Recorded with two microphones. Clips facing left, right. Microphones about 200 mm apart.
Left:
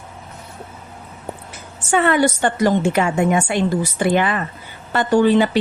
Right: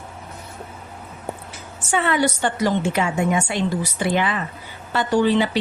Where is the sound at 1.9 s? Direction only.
50° left (ahead or behind).